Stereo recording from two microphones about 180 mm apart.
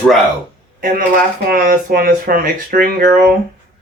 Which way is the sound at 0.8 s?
50° right (ahead or behind).